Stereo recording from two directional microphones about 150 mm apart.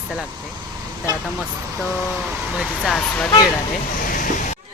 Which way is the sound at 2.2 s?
5° right (ahead or behind).